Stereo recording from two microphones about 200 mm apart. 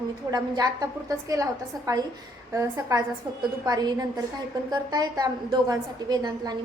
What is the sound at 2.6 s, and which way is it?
A woman's voice, 15° right (ahead or behind).